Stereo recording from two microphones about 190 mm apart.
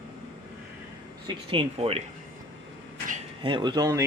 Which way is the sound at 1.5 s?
30° right (ahead or behind).